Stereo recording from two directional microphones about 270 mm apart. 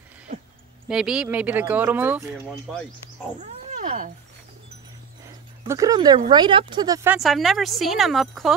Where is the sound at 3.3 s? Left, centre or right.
Right.